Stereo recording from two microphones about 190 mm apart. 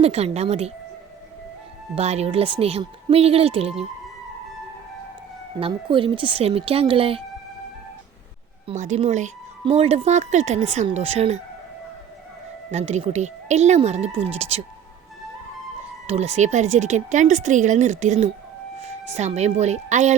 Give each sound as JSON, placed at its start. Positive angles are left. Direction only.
{"t": 0.0, "sound": "speech", "side_deg": -35}
{"t": 2.0, "sound": "speech", "side_deg": -35}
{"t": 5.5, "sound": "speech", "side_deg": -30}
{"t": 8.6, "sound": "speech", "side_deg": -40}
{"t": 12.7, "sound": "speech", "side_deg": -35}
{"t": 16.0, "sound": "speech", "side_deg": -35}